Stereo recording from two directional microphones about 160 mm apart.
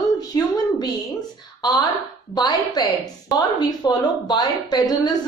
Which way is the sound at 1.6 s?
25° left (ahead or behind).